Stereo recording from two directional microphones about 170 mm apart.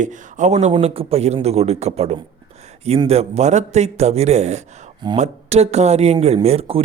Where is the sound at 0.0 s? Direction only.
45° right (ahead or behind).